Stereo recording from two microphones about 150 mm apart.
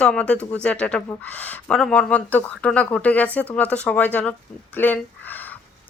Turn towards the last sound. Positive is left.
turn(degrees=10)  # may be behind; listen again after turning